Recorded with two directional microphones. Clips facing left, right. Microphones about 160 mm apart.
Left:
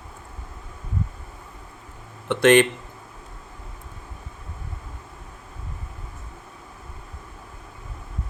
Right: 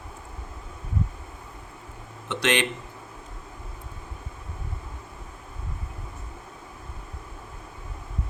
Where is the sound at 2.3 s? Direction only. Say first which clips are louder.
Left 10 dB; 50° left (ahead or behind).